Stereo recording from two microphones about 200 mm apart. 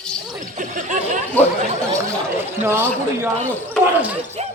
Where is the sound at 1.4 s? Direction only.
10° left (ahead or behind).